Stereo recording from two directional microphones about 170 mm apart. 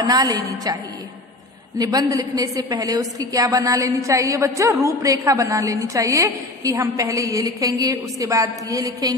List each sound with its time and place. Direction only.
0.0 s a woman's voice: 20° right (ahead or behind)
1.8 s a woman's voice: 20° right (ahead or behind)